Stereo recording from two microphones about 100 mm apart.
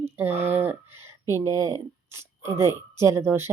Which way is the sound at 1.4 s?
35° right (ahead or behind).